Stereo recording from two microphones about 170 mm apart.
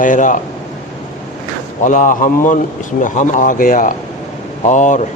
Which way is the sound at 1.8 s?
50° left (ahead or behind).